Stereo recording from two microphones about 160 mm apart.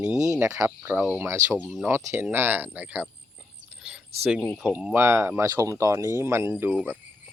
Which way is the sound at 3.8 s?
5° right (ahead or behind).